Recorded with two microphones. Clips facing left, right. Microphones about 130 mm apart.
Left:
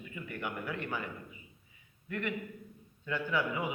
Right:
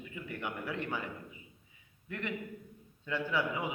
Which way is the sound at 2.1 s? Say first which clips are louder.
Left 2 dB; 25° right (ahead or behind).